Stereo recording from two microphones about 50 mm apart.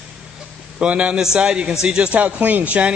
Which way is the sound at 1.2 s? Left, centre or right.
Centre.